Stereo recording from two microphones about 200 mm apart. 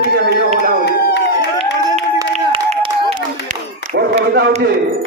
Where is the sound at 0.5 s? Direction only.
40° right (ahead or behind).